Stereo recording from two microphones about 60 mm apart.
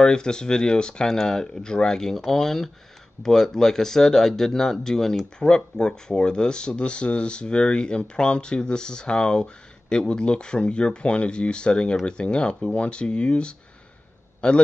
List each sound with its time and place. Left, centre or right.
0.0 s speech: centre